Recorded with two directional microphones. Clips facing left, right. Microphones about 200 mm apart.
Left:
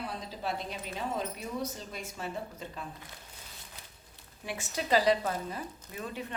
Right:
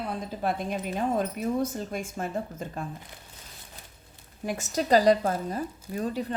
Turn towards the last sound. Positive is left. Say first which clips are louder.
# right 9 dB
turn(degrees=-35)  # may be behind; listen again after turning